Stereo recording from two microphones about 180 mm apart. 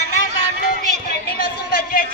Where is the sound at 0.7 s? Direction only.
60° left (ahead or behind).